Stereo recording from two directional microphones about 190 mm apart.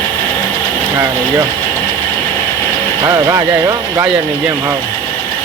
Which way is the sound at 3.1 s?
15° right (ahead or behind).